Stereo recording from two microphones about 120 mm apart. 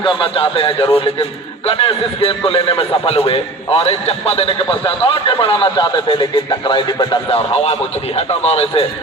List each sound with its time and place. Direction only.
0.0 s a man's voice: 45° left (ahead or behind)
7.3 s a man's voice: 55° left (ahead or behind)